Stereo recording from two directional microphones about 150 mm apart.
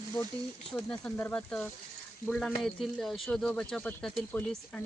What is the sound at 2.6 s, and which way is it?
Speech, centre (ahead or behind).